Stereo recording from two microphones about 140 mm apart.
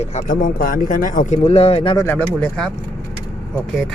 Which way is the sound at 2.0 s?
15° left (ahead or behind).